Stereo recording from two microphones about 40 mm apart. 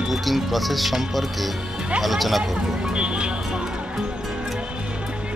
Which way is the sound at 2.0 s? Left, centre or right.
Centre.